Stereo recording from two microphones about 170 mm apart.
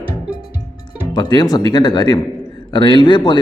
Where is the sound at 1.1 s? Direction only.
25° left (ahead or behind).